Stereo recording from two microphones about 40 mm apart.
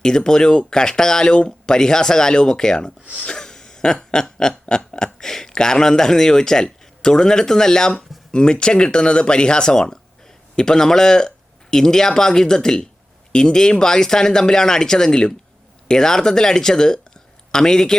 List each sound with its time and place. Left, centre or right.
0.0 s speech: centre
3.2 s a sound: centre
4.7 s speech: centre